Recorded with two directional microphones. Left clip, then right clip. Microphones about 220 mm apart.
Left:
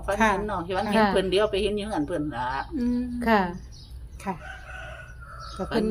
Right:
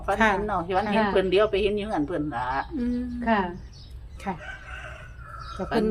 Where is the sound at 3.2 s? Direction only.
40° left (ahead or behind).